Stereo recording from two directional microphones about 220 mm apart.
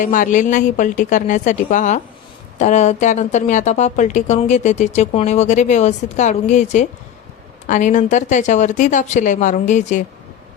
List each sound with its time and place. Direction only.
0.0 s speech: 35° left (ahead or behind)